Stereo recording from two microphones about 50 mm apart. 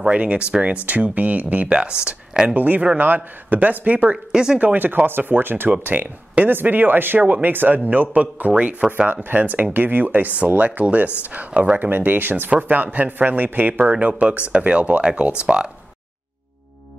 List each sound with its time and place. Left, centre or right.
0.1 s speech: right
1.8 s speech: centre
2.5 s speech: right
4.3 s speech: centre
4.6 s speech: right
13.9 s speech: right